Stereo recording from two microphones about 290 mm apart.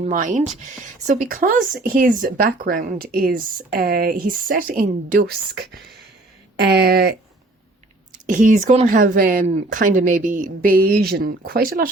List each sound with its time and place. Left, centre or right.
0.0 s speech: right
8.3 s speech: right